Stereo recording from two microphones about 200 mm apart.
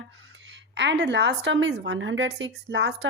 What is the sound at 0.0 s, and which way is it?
A woman's voice, 65° right (ahead or behind).